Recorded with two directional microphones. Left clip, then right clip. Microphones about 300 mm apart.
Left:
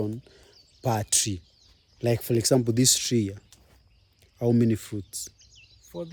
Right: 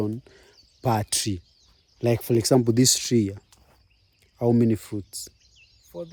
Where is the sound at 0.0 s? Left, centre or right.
Right.